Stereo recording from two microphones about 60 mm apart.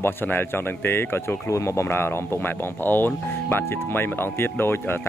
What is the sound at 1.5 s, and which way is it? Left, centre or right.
Speech, left.